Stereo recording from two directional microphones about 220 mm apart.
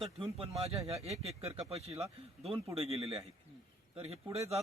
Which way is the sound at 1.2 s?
25° right (ahead or behind).